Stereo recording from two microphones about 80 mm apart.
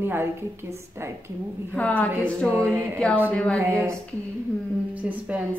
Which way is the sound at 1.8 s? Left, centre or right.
Centre.